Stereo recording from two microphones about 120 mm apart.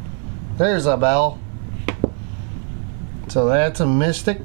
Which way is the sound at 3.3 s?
15° right (ahead or behind).